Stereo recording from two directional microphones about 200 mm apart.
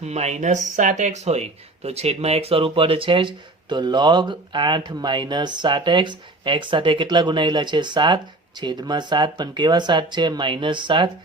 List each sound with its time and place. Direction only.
0.0 s speech: 35° right (ahead or behind)